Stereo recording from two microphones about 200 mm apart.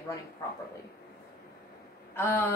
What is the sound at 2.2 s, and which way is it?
Speech, 10° left (ahead or behind).